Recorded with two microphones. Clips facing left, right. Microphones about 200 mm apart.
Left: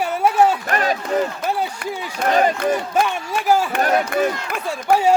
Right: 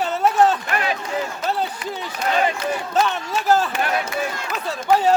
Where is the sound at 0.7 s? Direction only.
40° left (ahead or behind).